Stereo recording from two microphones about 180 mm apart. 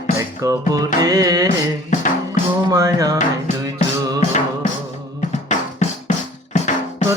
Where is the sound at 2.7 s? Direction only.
20° right (ahead or behind).